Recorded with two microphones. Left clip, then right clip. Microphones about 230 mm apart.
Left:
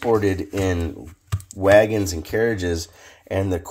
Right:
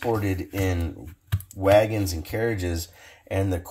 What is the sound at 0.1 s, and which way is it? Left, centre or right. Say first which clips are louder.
Speech: left 10 dB; left.